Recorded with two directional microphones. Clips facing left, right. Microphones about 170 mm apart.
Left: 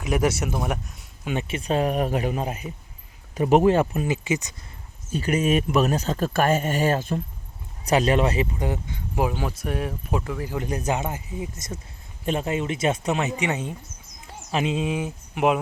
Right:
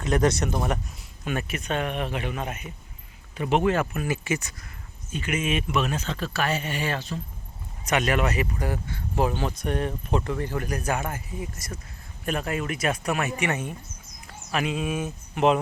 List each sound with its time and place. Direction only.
0.0 s speech: 5° left (ahead or behind)
1.2 s a man's voice: 20° left (ahead or behind)
4.1 s speech: 15° left (ahead or behind)
5.1 s speech: 35° left (ahead or behind)
7.9 s speech: 30° left (ahead or behind); by 10.6 s 5° left (ahead or behind)
10.6 s speech: 20° left (ahead or behind)